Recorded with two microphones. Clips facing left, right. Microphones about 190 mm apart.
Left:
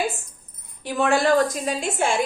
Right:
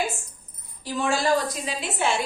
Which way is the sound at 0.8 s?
60° left (ahead or behind).